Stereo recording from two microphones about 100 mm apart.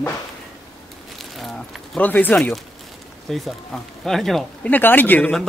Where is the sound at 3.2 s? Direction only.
5° left (ahead or behind).